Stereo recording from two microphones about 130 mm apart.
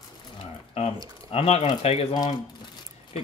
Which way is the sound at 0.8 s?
50° left (ahead or behind).